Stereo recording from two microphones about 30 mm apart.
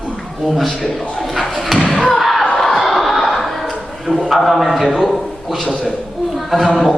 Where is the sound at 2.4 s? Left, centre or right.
Centre.